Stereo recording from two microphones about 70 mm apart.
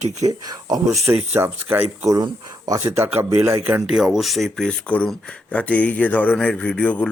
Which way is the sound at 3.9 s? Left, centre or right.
Centre.